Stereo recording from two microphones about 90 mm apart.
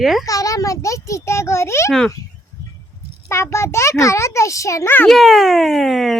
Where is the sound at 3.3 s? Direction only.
30° left (ahead or behind).